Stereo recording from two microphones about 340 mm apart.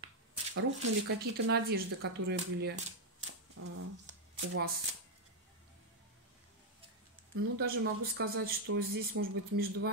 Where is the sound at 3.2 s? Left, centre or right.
Right.